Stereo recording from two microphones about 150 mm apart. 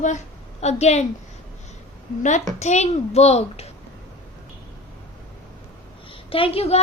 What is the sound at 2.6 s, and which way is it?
Child singing, 50° left (ahead or behind).